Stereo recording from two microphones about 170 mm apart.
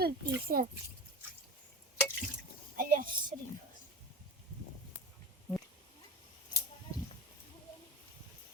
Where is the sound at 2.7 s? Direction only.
55° right (ahead or behind).